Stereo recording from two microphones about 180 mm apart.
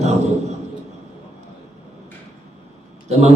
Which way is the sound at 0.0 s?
40° right (ahead or behind).